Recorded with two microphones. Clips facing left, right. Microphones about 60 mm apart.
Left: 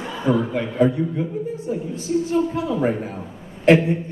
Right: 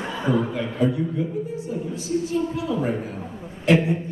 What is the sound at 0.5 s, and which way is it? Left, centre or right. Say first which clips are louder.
Speech: left 4 dB; left.